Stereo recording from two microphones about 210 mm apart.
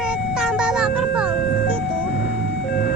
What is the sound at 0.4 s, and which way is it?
Music, 5° right (ahead or behind).